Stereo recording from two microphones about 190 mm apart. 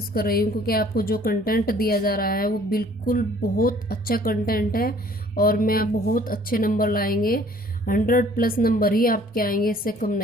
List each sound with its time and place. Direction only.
0.1 s a woman's voice: 50° left (ahead or behind)